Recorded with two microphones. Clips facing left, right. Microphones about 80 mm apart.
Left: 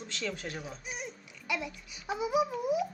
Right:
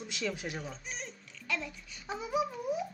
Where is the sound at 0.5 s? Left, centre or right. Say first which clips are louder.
Left 1 dB; centre.